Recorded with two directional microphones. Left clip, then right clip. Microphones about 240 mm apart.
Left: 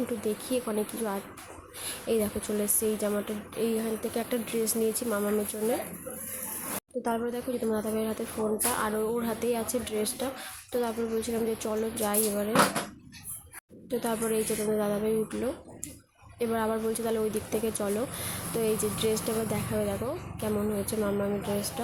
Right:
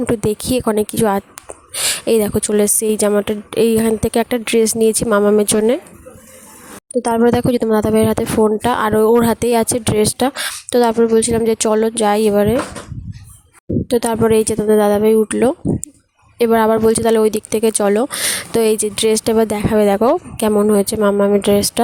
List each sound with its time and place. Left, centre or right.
0.2 s speech: right
7.0 s speech: right
13.8 s speech: right